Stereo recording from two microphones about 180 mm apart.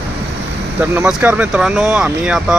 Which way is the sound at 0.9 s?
5° right (ahead or behind).